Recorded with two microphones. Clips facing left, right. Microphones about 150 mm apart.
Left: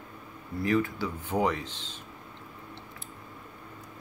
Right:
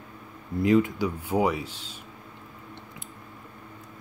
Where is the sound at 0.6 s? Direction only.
20° right (ahead or behind).